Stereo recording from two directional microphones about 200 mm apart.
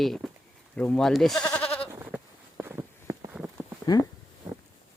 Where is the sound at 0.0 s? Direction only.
Centre (ahead or behind).